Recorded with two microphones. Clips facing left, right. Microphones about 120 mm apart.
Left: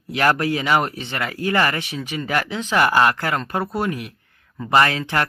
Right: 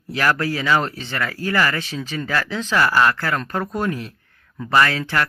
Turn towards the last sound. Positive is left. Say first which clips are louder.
# even
turn(degrees=20)  # may be behind; listen again after turning